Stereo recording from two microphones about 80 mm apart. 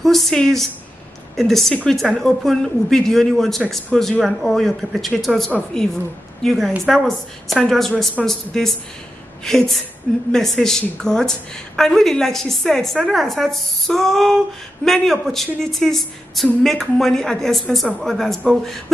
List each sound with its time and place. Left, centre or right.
0.0 s a woman's voice: centre